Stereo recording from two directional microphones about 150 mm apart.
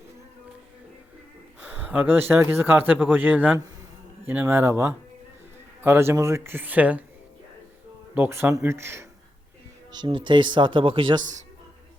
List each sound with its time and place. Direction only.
1.6 s speech: 10° right (ahead or behind)
5.8 s speech: 15° right (ahead or behind)
8.1 s speech: 15° right (ahead or behind)
9.9 s speech: 30° right (ahead or behind)